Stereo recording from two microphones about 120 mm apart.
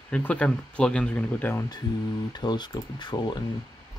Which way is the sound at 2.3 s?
35° left (ahead or behind).